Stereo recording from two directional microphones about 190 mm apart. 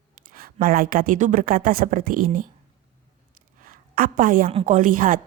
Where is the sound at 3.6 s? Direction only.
50° right (ahead or behind).